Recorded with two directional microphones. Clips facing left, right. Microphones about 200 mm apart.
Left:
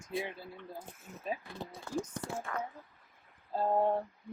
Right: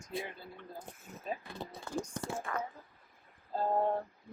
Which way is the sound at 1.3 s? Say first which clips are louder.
Right 3 dB; 5° left (ahead or behind).